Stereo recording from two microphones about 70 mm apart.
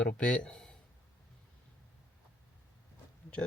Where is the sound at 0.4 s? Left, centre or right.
Centre.